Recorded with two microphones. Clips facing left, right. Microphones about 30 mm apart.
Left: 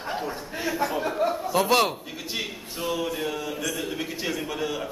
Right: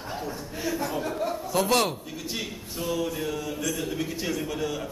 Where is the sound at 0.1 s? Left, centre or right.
Left.